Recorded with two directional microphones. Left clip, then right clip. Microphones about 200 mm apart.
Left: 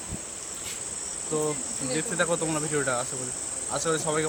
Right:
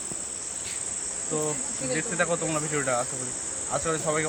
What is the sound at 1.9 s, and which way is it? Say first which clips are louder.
Cricket: even; 10° left (ahead or behind).